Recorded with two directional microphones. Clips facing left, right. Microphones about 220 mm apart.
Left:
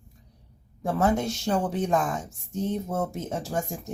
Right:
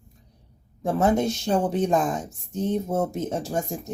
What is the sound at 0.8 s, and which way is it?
Speech, 20° right (ahead or behind).